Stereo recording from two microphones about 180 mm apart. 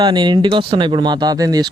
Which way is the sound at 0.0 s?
25° right (ahead or behind).